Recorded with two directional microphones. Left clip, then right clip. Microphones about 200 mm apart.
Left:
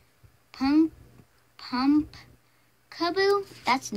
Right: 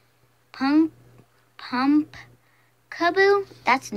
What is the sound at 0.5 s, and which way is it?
Speech, 15° left (ahead or behind).